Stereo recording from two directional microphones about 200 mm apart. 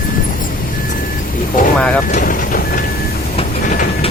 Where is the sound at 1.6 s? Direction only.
45° left (ahead or behind).